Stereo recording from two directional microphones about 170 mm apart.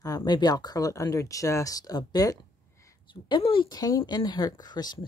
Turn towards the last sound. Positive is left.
turn(degrees=25)  # may be behind; listen again after turning